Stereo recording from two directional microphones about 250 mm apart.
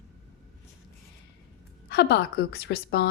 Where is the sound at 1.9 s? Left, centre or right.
Left.